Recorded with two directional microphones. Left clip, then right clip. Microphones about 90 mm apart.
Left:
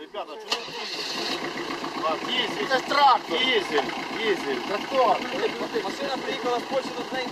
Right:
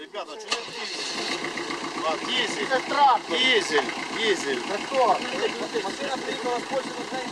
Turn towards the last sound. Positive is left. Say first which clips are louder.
# left 1 dB
turn(degrees=-25)  # may be behind; listen again after turning